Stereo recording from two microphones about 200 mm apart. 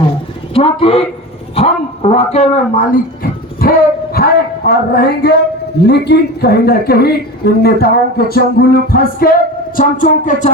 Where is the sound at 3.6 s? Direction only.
45° left (ahead or behind).